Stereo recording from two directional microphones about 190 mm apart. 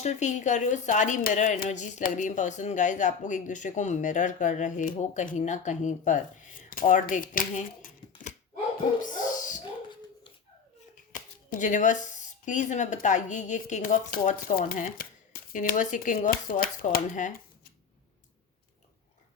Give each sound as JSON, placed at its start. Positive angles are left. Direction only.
{"t": 0.0, "sound": "a woman's voice", "side_deg": 40}
{"t": 9.0, "sound": "dog", "side_deg": 45}
{"t": 11.6, "sound": "a woman's voice", "side_deg": 40}